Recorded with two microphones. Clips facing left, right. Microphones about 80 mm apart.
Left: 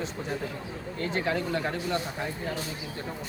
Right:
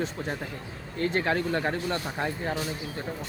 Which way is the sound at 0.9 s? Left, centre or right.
Right.